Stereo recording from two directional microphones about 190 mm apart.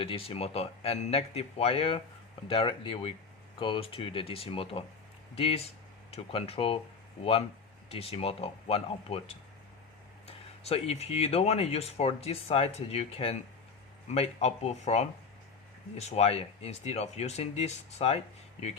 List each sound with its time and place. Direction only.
0.0 s speech: 30° left (ahead or behind)
7.9 s speech: 30° left (ahead or behind)